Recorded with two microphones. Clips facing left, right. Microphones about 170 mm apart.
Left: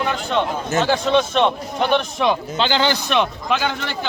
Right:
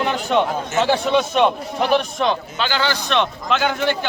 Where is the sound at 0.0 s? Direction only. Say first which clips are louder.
Right 2 dB; 10° right (ahead or behind).